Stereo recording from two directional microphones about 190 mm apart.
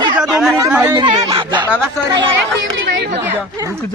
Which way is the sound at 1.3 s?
25° right (ahead or behind).